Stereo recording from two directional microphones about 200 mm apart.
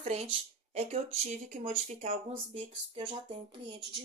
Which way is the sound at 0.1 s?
30° right (ahead or behind).